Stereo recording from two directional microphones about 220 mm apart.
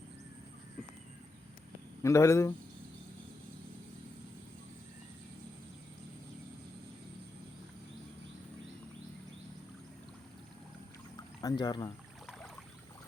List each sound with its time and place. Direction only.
2.0 s speech: 15° left (ahead or behind)
11.3 s speech: 15° left (ahead or behind)